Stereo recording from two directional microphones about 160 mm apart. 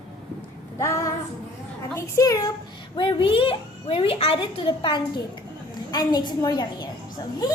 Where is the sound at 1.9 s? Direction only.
20° left (ahead or behind).